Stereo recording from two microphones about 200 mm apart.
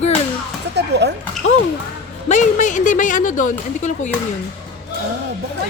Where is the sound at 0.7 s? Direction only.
60° right (ahead or behind).